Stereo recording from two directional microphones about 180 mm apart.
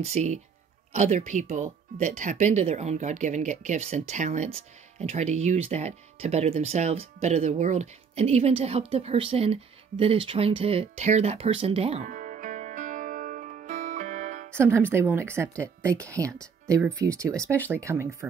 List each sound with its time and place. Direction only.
0.0 s speech: 40° right (ahead or behind)
14.5 s speech: 15° right (ahead or behind)